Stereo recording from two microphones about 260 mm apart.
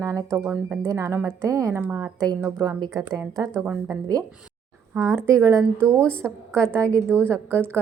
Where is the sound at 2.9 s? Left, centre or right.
Centre.